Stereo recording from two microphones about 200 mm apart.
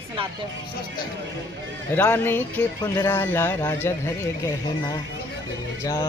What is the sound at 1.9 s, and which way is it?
Speech, 10° left (ahead or behind).